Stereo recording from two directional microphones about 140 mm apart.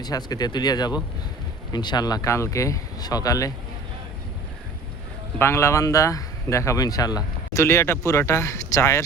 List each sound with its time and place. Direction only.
0.0 s speech: 30° left (ahead or behind)
5.4 s speech: 20° left (ahead or behind)